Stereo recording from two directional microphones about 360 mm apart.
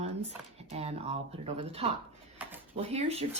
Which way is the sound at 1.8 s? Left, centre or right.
Centre.